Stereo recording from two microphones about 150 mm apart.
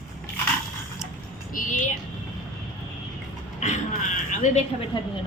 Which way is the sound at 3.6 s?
50° left (ahead or behind).